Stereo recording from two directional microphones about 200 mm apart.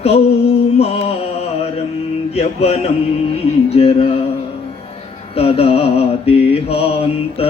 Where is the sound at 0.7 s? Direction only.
30° left (ahead or behind).